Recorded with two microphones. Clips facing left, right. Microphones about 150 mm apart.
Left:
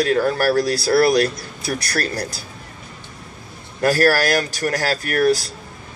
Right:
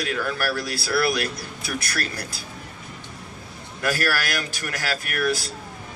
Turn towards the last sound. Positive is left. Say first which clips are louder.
# left 7 dB
turn(degrees=40)  # may be behind; listen again after turning